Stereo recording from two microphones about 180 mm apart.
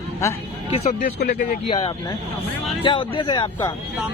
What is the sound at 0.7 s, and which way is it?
Speech, 40° left (ahead or behind).